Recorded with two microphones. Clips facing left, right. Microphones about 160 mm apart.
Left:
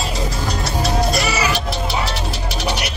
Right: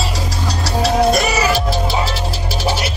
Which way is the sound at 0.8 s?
50° right (ahead or behind).